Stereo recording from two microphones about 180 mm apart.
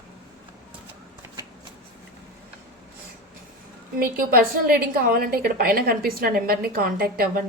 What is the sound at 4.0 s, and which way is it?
A woman's voice, 55° right (ahead or behind).